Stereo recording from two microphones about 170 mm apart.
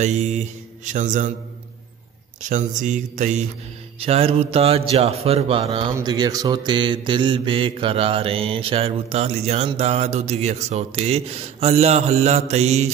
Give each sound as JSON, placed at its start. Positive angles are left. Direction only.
{"t": 0.0, "sound": "mantra", "side_deg": -40}
{"t": 2.5, "sound": "mantra", "side_deg": -45}
{"t": 4.0, "sound": "mantra", "side_deg": -35}